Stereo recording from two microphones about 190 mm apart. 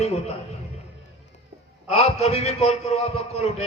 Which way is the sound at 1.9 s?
35° left (ahead or behind).